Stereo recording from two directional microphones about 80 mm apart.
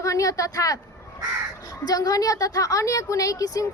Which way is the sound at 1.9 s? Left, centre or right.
Left.